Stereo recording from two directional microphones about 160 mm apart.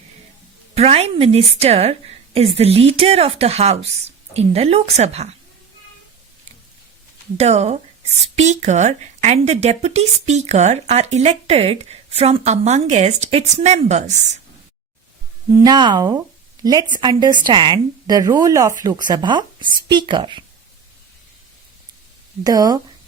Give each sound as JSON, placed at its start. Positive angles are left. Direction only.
{"t": 0.8, "sound": "a woman's voice", "side_deg": -40}
{"t": 7.3, "sound": "speech", "side_deg": -45}
{"t": 15.5, "sound": "speech", "side_deg": -25}
{"t": 22.4, "sound": "speech", "side_deg": -25}